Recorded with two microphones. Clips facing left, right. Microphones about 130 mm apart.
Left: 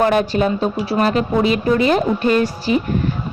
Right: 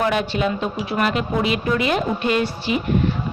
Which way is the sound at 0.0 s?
45° left (ahead or behind).